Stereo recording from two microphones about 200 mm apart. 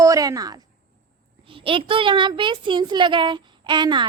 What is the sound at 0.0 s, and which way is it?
A woman's voice, 15° right (ahead or behind).